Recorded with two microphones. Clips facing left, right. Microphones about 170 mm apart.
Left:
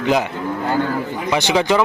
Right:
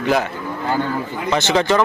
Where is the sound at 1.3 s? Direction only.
15° left (ahead or behind).